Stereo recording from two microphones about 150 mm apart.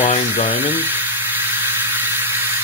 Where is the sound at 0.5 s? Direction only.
15° right (ahead or behind).